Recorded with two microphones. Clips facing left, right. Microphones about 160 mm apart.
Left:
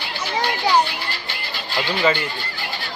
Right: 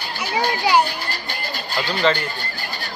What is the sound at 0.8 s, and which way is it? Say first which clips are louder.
Music: right 1 dB; 45° right (ahead or behind).